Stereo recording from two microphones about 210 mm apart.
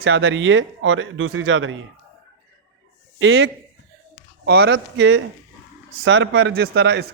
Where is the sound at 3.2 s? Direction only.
65° right (ahead or behind).